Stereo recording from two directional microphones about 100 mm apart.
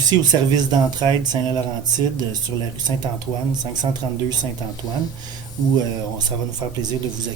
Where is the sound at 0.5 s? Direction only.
45° right (ahead or behind).